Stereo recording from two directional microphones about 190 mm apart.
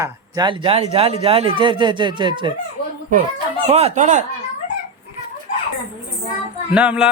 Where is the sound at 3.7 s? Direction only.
35° right (ahead or behind).